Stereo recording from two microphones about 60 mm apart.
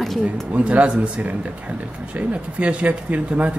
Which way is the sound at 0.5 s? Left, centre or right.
Right.